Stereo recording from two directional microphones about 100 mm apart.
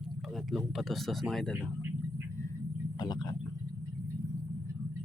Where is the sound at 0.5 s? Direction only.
Centre (ahead or behind).